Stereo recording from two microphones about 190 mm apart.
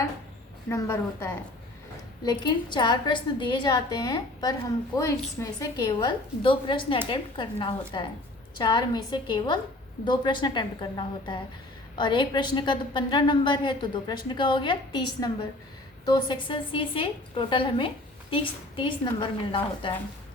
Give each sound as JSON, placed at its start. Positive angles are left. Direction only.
{"t": 0.7, "sound": "a woman's voice", "side_deg": 15}